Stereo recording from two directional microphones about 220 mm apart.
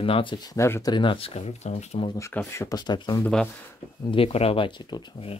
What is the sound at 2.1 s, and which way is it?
Speech, 10° left (ahead or behind).